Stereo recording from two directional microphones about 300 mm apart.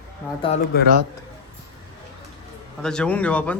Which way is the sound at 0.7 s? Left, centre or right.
Left.